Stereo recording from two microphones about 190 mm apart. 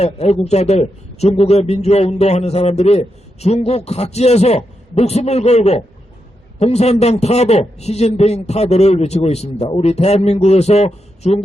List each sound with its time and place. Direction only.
0.0 s a man's voice: 35° left (ahead or behind)